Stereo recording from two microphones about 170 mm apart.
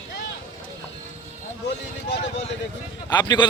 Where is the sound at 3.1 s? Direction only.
25° left (ahead or behind).